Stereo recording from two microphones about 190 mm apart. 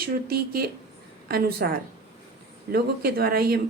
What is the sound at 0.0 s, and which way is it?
A woman's voice, 55° right (ahead or behind).